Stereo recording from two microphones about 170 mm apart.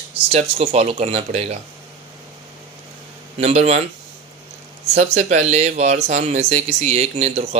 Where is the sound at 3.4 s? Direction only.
40° right (ahead or behind).